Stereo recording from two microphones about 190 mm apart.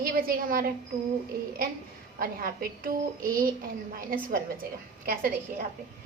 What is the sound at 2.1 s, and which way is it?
A woman's voice, 50° right (ahead or behind).